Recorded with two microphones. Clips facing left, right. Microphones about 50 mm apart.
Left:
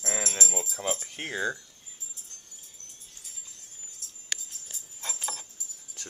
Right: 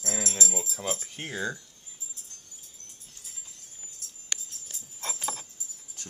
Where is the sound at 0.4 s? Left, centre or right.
Left.